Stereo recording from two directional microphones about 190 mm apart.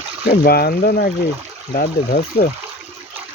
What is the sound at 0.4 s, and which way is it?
Speech, 50° left (ahead or behind).